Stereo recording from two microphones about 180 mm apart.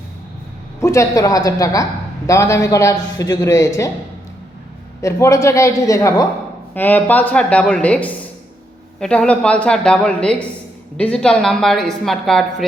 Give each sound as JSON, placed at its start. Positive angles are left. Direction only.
{"t": 0.8, "sound": "a woman's voice", "side_deg": 15}
{"t": 5.0, "sound": "a woman's voice", "side_deg": 15}